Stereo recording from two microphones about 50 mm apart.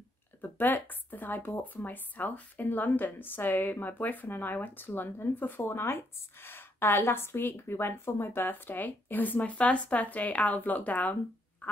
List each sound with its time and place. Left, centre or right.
0.4 s a woman's voice: left
11.6 s frog: left